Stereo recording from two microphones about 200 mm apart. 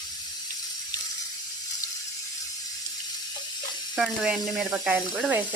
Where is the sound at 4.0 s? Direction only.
Centre (ahead or behind).